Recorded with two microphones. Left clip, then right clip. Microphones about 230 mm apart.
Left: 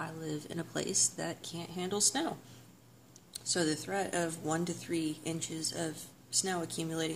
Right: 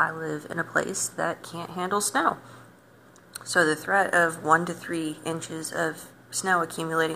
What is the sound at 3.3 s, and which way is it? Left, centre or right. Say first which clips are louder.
Speech: right 11 dB; left.